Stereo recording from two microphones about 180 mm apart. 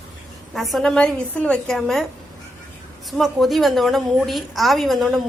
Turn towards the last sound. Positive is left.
turn(degrees=0)  # may be behind; listen again after turning